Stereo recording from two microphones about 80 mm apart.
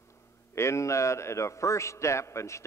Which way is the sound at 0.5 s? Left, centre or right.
Left.